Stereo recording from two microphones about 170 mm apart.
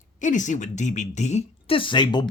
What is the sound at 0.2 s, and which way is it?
Speech, 45° left (ahead or behind).